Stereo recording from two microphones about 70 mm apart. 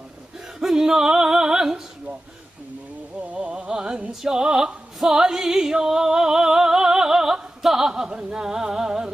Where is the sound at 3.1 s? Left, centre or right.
Centre.